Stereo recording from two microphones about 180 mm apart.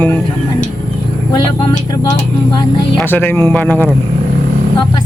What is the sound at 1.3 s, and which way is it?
Music, 30° left (ahead or behind).